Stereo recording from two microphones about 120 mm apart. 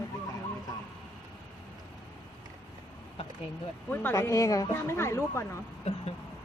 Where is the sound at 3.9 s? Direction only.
20° left (ahead or behind).